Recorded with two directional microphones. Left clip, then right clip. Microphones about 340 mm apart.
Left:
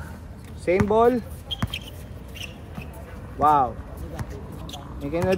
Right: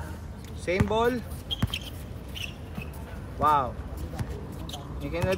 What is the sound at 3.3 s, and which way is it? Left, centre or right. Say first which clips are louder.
Speech: left 5 dB; left.